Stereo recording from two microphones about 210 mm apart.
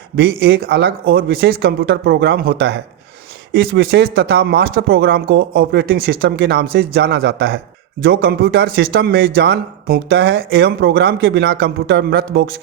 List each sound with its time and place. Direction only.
0.2 s speech: 50° right (ahead or behind)